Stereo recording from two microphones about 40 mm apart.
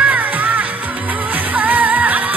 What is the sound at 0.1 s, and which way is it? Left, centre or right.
Music, right.